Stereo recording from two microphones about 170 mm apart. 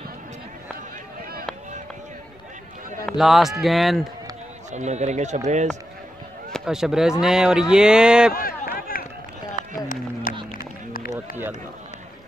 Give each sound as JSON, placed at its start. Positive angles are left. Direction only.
{"t": 3.1, "sound": "speech", "side_deg": 0}
{"t": 4.7, "sound": "speech", "side_deg": -40}
{"t": 6.5, "sound": "speech", "side_deg": -5}
{"t": 8.4, "sound": "run", "side_deg": 60}
{"t": 10.3, "sound": "music", "side_deg": 55}
{"t": 10.9, "sound": "run", "side_deg": 55}